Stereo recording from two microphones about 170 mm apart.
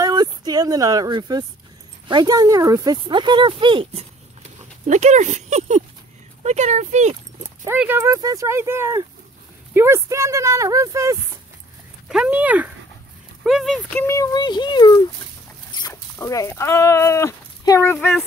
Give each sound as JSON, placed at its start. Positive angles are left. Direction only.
{"t": 0.0, "sound": "a sound", "side_deg": -20}
{"t": 2.0, "sound": "speech", "side_deg": -25}
{"t": 4.8, "sound": "speech", "side_deg": -45}
{"t": 7.6, "sound": "speech", "side_deg": -10}
{"t": 12.1, "sound": "speech", "side_deg": -5}
{"t": 13.9, "sound": "speech", "side_deg": 15}